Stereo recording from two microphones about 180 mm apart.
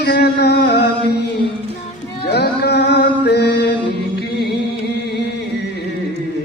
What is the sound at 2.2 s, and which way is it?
Music, 65° left (ahead or behind).